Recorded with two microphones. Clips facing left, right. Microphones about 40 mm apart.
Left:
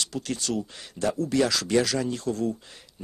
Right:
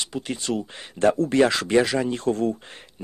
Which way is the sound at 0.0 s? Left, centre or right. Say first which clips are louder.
Right 2 dB; right.